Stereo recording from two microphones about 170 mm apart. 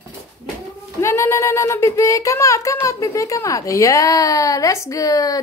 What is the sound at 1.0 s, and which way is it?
Speech, 15° left (ahead or behind).